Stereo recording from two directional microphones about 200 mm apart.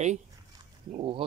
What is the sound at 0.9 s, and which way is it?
Speech, 25° right (ahead or behind).